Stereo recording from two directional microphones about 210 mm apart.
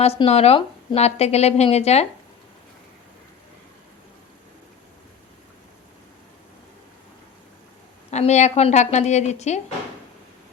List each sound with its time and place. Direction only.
0.0 s speech: 30° left (ahead or behind)
8.1 s speech: 35° left (ahead or behind)